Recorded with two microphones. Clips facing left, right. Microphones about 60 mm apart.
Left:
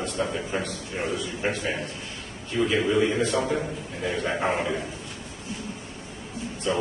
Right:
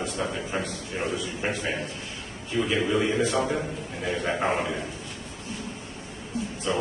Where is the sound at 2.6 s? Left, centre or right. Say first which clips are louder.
Left 2 dB; centre.